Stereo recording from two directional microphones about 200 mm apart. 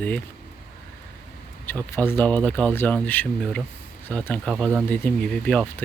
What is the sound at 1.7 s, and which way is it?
Speech, 10° left (ahead or behind).